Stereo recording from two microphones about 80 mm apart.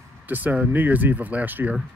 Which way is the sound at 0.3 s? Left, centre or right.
Right.